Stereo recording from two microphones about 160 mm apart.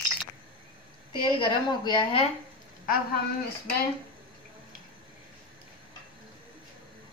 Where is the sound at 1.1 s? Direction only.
30° left (ahead or behind).